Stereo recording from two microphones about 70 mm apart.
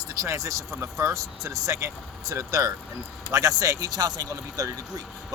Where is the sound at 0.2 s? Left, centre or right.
Right.